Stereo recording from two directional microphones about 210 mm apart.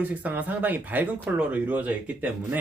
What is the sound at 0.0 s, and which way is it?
Speech, 5° right (ahead or behind).